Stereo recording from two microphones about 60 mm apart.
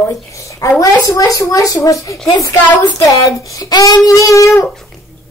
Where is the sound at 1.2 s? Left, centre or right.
Left.